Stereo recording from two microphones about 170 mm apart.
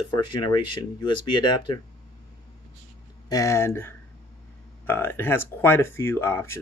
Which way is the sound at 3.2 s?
20° left (ahead or behind).